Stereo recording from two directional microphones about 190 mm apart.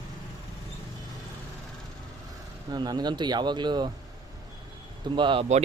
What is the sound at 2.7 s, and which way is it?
Speech, 20° right (ahead or behind).